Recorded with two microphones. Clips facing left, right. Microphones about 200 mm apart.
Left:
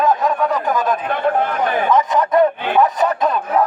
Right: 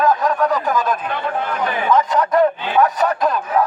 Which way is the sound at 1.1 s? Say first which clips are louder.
Left 5 dB; 50° left (ahead or behind).